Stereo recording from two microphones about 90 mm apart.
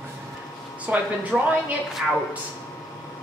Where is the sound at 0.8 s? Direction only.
15° right (ahead or behind).